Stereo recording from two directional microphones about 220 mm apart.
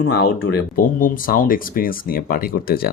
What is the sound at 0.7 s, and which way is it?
Speech, 40° left (ahead or behind).